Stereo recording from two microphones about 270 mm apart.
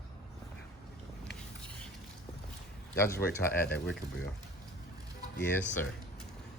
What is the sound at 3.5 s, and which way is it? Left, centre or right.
Speech, left.